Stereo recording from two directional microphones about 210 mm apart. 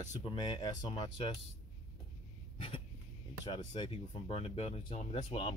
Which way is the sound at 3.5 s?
25° left (ahead or behind).